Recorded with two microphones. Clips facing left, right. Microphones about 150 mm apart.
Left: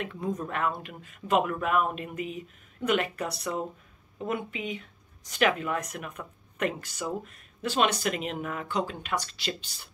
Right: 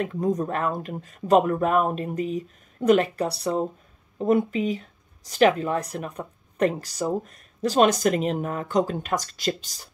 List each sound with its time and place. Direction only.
0.0 s speech: 40° right (ahead or behind)